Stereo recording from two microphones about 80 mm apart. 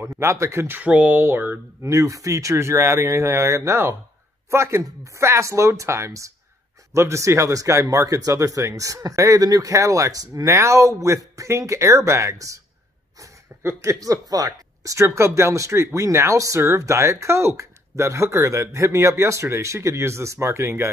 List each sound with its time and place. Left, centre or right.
0.0 s speech: right
0.8 s speech: centre
1.9 s speech: right
13.6 s speech: right